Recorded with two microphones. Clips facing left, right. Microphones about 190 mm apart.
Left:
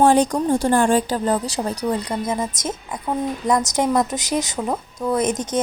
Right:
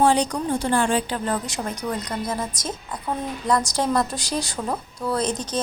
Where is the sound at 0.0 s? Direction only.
50° left (ahead or behind); by 2.3 s 30° left (ahead or behind).